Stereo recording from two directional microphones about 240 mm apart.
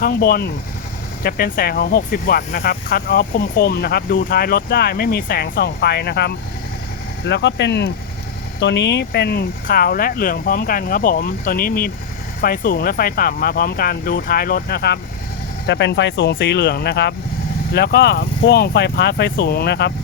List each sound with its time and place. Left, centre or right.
0.0 s speech: left